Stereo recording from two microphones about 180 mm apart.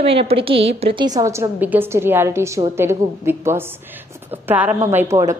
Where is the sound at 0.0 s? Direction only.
35° right (ahead or behind).